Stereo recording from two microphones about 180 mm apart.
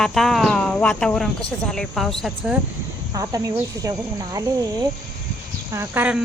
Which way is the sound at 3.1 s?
20° right (ahead or behind).